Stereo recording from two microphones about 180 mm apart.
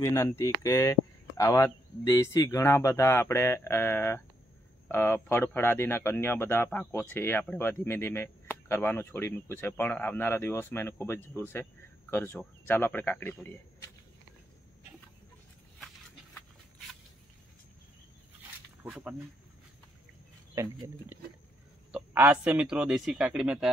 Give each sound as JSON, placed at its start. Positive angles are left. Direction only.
{"t": 0.0, "sound": "speech", "side_deg": 15}
{"t": 18.9, "sound": "speech", "side_deg": -10}
{"t": 21.9, "sound": "a man's voice", "side_deg": -10}